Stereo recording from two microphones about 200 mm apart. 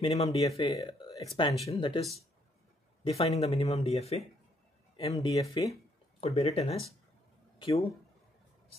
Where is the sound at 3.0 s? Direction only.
30° left (ahead or behind).